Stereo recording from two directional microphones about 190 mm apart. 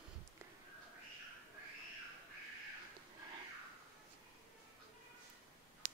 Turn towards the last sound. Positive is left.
turn(degrees=-40)  # may be behind; listen again after turning